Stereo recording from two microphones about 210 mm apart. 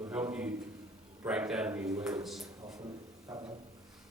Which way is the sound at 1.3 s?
5° right (ahead or behind).